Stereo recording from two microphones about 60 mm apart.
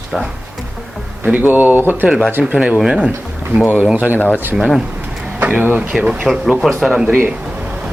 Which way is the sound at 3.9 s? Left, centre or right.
Right.